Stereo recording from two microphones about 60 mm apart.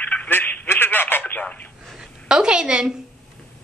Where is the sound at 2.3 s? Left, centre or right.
Centre.